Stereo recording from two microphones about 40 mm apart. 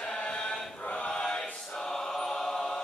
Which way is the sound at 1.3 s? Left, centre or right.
Left.